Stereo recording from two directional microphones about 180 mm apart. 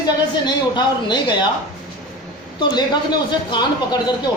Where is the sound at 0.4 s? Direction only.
25° left (ahead or behind).